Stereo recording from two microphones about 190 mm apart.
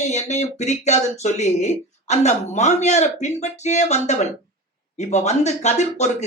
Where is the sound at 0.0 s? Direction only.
35° left (ahead or behind).